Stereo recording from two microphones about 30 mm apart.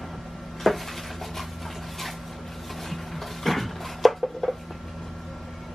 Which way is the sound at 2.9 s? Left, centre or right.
Centre.